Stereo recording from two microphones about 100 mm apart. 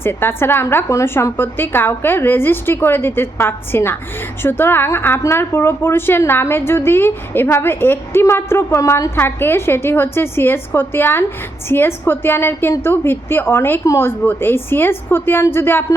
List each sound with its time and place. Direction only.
0.0 s speech: 20° left (ahead or behind)